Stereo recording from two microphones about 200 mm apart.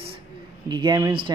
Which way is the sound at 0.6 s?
20° right (ahead or behind).